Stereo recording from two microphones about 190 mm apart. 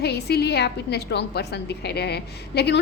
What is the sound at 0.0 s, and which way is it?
A woman's voice, 60° left (ahead or behind).